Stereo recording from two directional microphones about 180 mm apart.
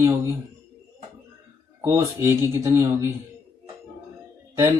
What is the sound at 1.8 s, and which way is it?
Speech, 15° right (ahead or behind).